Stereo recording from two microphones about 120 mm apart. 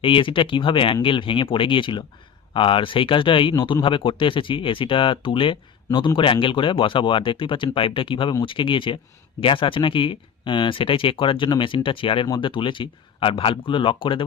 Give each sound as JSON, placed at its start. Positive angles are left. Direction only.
{"t": 0.0, "sound": "speech", "side_deg": 45}